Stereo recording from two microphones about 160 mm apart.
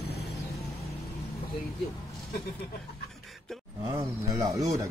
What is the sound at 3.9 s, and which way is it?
Speech, 20° right (ahead or behind).